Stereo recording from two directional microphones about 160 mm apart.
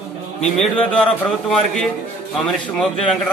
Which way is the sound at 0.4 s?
5° left (ahead or behind).